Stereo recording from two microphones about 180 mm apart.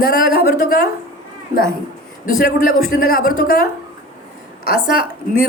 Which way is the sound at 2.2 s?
50° left (ahead or behind).